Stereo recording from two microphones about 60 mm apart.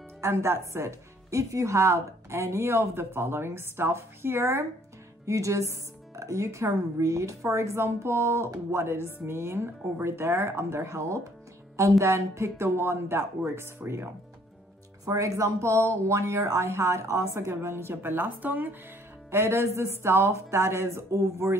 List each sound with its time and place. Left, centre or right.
0.2 s a woman's voice: right
5.2 s a woman's voice: right
15.0 s a woman's voice: right
19.3 s a woman's voice: right